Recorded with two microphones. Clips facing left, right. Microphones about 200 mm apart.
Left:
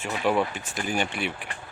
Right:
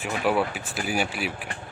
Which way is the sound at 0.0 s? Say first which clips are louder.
Even; 5° right (ahead or behind).